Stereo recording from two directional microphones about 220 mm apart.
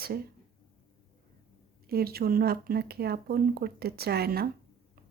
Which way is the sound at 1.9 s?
45° right (ahead or behind).